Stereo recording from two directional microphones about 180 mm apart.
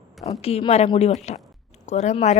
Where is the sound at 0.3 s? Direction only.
35° left (ahead or behind).